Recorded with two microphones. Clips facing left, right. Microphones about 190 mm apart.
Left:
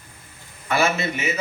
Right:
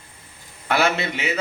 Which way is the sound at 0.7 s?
65° right (ahead or behind).